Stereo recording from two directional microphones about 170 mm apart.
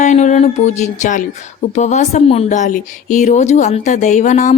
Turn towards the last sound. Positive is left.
turn(degrees=45)  # may be behind; listen again after turning